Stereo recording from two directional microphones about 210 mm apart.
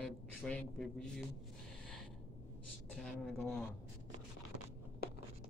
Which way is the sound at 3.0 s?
5° left (ahead or behind).